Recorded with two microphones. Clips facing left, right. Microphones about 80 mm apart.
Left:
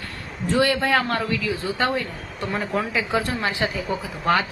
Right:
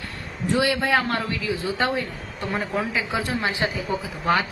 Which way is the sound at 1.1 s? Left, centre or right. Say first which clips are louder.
Left 2 dB; right.